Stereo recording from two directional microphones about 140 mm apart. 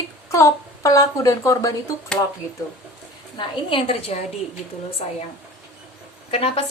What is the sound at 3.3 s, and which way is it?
Speech, 40° left (ahead or behind).